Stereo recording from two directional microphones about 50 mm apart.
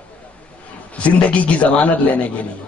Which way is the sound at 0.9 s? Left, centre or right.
Left.